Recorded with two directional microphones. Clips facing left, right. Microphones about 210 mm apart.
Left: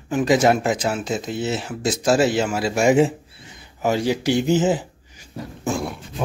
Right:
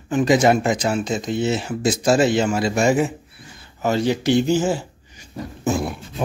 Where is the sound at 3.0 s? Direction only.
25° left (ahead or behind).